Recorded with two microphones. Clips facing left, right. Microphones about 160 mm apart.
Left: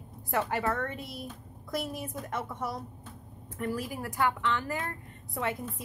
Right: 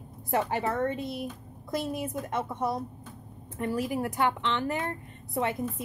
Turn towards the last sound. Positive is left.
turn(degrees=-25)  # may be behind; listen again after turning